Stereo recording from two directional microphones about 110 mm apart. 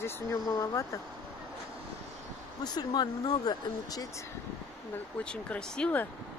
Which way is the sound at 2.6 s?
40° left (ahead or behind).